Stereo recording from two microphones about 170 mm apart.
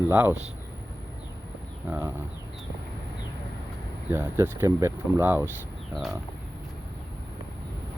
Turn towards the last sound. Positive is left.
turn(degrees=0)  # may be behind; listen again after turning